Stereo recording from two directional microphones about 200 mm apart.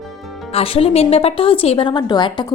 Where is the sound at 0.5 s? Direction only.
30° left (ahead or behind).